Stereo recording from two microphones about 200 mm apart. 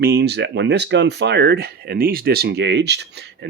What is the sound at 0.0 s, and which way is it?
Speech, 55° right (ahead or behind).